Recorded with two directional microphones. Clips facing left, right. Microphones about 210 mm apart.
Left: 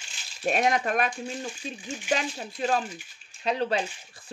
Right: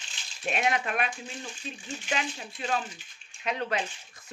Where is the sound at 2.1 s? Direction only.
40° left (ahead or behind).